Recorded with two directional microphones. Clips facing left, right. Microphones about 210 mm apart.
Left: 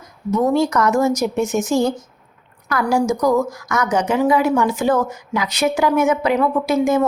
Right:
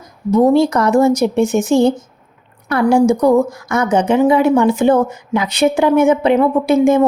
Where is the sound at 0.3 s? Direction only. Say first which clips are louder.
Right 6 dB; 30° right (ahead or behind).